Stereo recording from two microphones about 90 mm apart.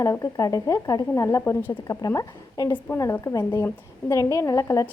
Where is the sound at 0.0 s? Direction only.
40° left (ahead or behind).